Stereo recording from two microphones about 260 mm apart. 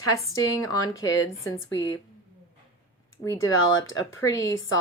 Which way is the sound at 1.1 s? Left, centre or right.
Centre.